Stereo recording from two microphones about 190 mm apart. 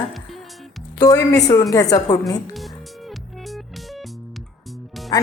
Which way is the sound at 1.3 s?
20° left (ahead or behind).